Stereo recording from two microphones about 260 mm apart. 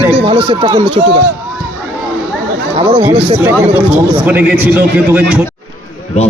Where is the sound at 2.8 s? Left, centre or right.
Right.